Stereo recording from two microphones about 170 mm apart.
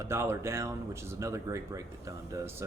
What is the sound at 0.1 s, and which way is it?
Speech, 15° right (ahead or behind).